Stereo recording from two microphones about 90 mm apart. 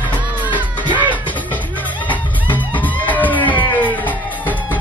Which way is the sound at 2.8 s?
20° left (ahead or behind).